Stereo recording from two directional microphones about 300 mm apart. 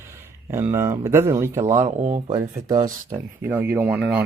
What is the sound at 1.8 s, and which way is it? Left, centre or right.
Speech, right.